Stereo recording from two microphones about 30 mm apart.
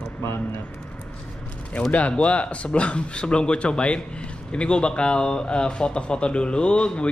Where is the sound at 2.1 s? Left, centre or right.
Left.